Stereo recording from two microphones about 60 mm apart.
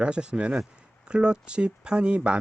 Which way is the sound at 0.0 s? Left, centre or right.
Centre.